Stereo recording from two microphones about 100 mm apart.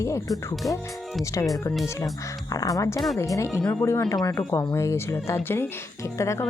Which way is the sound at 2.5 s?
35° left (ahead or behind).